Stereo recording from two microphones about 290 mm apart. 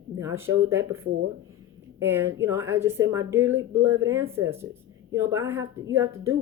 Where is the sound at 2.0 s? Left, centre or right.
Centre.